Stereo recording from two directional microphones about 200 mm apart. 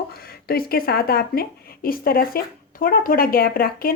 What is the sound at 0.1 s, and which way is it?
Speech, 50° left (ahead or behind).